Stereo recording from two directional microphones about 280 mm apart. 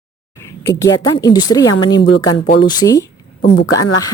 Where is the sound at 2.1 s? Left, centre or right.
Left.